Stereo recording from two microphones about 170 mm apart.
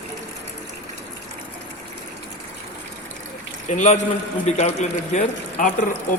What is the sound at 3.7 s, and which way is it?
A man's voice, 45° left (ahead or behind).